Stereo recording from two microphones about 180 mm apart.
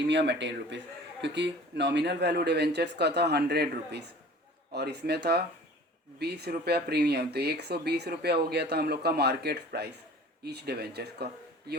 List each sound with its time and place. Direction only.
0.0 s speech: 75° right (ahead or behind)